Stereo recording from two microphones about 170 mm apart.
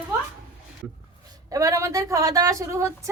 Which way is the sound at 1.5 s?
20° right (ahead or behind).